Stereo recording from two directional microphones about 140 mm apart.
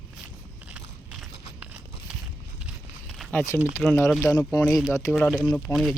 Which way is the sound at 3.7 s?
20° left (ahead or behind).